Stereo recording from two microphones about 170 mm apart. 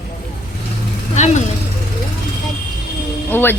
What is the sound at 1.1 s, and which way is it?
Speech, 45° left (ahead or behind).